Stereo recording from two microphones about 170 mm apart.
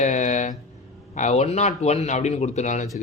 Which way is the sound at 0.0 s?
45° left (ahead or behind).